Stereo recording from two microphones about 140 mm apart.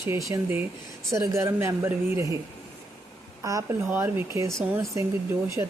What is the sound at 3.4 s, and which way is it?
A woman's voice, 25° right (ahead or behind).